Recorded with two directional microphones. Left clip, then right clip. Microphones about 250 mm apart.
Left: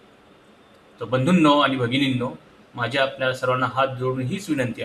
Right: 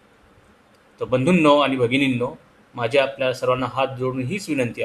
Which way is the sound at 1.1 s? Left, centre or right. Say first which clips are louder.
Right 2 dB; centre.